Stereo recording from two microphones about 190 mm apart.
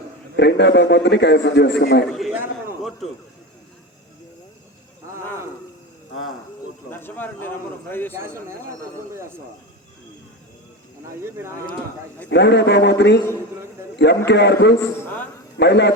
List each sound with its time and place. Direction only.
0.3 s a man's voice: 65° left (ahead or behind)
2.1 s a man's voice: centre (ahead or behind)
6.9 s a man's voice: 10° left (ahead or behind)
8.1 s speech: 15° right (ahead or behind)
11.2 s speech: 15° right (ahead or behind)
12.3 s a man's voice: 65° left (ahead or behind)
14.3 s a man's voice: 65° left (ahead or behind)
14.8 s a man's voice: 10° left (ahead or behind)
15.5 s a man's voice: 65° left (ahead or behind)